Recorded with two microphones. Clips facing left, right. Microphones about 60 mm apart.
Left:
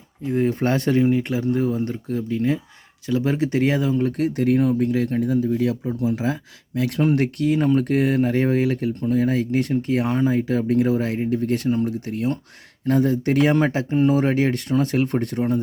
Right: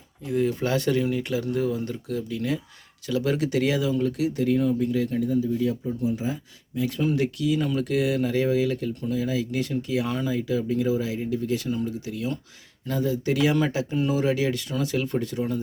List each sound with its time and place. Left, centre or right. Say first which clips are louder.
0.3 s speech: left 3 dB; left
6.0 s speech: left 4 dB; left